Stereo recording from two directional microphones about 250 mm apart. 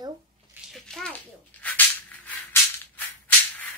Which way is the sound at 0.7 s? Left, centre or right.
Centre.